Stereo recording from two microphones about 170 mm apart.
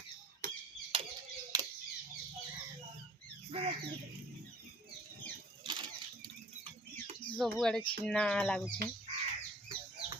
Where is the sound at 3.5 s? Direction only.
35° right (ahead or behind).